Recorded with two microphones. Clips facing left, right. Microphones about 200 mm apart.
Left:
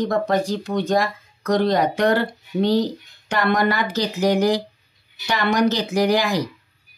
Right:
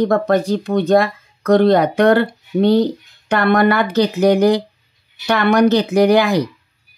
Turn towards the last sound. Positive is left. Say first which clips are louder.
# right 6 dB
turn(degrees=-60)  # may be behind; listen again after turning